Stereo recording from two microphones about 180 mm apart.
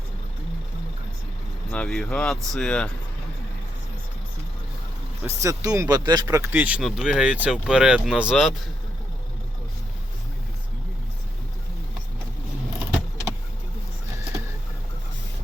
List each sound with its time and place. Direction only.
1.7 s speech: 5° left (ahead or behind)
5.2 s speech: 15° right (ahead or behind)